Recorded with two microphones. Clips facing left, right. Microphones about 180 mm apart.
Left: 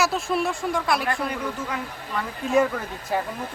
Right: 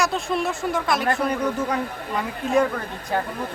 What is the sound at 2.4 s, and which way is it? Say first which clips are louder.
Speech: even; centre (ahead or behind).